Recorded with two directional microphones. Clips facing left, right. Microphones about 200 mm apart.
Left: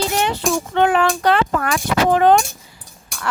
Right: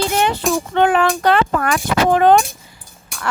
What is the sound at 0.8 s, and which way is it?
Speech, 55° right (ahead or behind).